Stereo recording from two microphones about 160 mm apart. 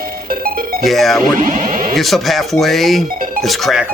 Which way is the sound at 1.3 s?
55° right (ahead or behind).